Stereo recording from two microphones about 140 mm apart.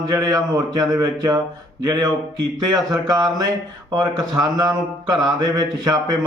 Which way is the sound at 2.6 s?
30° right (ahead or behind).